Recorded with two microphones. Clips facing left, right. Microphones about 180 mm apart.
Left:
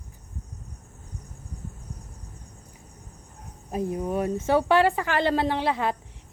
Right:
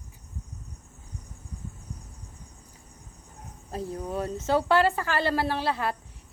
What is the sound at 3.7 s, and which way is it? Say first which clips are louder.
Speech: left 5 dB; 15° left (ahead or behind).